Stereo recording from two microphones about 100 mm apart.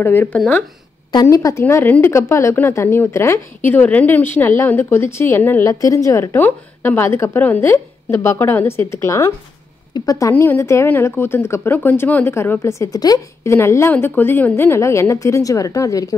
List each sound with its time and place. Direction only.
0.0 s speech: 20° left (ahead or behind)
1.2 s a woman's voice: 30° left (ahead or behind)
5.7 s a woman's voice: 35° left (ahead or behind)
13.5 s speech: 25° left (ahead or behind)